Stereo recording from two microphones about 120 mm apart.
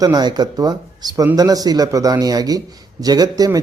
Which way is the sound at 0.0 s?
35° right (ahead or behind).